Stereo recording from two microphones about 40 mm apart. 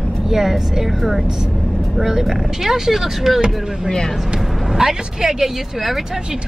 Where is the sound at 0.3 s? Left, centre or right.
Centre.